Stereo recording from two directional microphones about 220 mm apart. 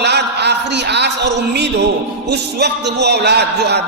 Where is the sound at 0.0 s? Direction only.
50° right (ahead or behind).